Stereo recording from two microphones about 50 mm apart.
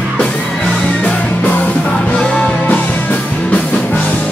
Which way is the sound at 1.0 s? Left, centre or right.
Left.